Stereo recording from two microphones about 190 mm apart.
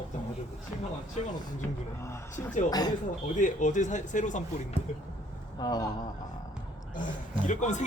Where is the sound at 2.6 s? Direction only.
20° left (ahead or behind).